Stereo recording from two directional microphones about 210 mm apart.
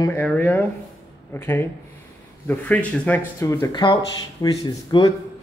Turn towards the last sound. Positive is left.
turn(degrees=20)  # may be behind; listen again after turning